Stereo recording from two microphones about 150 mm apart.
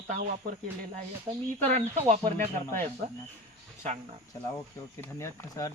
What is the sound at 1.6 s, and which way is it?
Speech, 50° right (ahead or behind).